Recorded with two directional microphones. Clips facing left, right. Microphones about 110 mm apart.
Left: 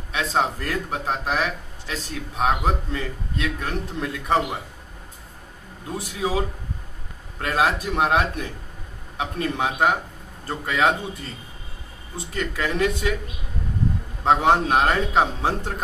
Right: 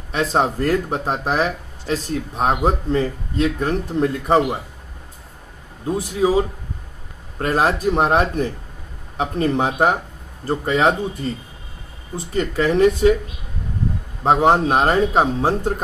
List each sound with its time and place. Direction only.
0.1 s speech: 45° right (ahead or behind)
5.9 s speech: 35° right (ahead or behind)
12.4 s speech: 45° right (ahead or behind)
14.2 s speech: 35° right (ahead or behind)